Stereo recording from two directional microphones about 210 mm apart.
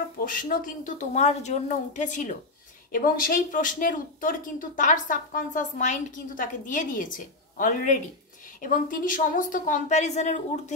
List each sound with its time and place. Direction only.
0.2 s speech: 40° left (ahead or behind)